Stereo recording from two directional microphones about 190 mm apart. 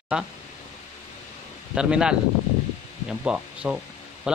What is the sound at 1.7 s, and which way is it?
A man's voice, 5° right (ahead or behind).